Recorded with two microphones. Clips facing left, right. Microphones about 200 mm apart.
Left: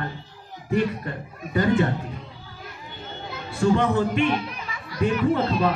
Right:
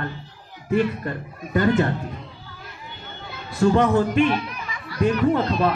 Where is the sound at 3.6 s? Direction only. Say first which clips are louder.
Right 2 dB; 40° right (ahead or behind).